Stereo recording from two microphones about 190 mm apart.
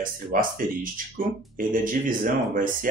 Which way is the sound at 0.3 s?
45° right (ahead or behind).